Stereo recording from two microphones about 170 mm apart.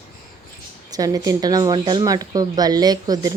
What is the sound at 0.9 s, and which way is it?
Speech, 20° right (ahead or behind).